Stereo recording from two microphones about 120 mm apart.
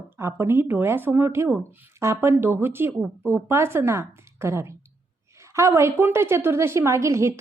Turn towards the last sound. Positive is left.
turn(degrees=-25)  # may be behind; listen again after turning